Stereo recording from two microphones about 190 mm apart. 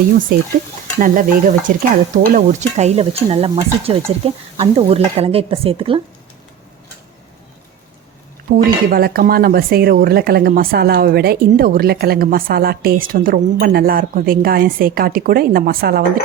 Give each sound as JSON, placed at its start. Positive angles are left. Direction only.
{"t": 0.3, "sound": "speech", "side_deg": -50}
{"t": 8.5, "sound": "speech", "side_deg": -50}